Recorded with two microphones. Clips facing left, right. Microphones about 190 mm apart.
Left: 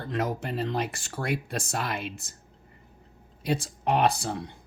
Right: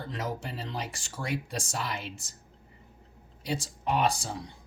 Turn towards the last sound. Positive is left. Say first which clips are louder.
# left 3 dB
turn(degrees=60)  # may be behind; listen again after turning